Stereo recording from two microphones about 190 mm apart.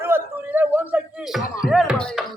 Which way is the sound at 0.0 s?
10° right (ahead or behind).